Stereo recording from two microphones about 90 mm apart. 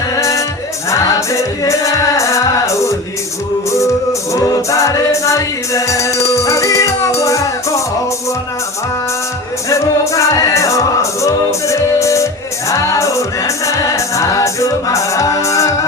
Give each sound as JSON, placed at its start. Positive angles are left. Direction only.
{"t": 0.2, "sound": "music", "side_deg": 35}
{"t": 9.6, "sound": "music", "side_deg": 35}